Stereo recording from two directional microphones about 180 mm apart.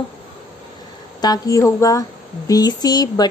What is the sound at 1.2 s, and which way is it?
Speech, 20° left (ahead or behind).